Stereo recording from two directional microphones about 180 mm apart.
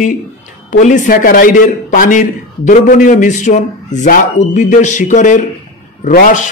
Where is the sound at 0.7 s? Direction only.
45° left (ahead or behind).